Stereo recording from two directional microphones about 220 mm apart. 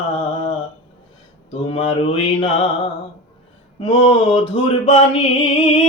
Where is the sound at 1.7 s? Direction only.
25° left (ahead or behind).